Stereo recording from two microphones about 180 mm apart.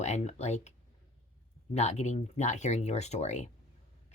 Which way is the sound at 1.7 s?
35° left (ahead or behind).